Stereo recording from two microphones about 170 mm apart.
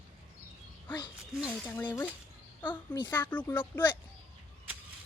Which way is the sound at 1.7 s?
15° left (ahead or behind).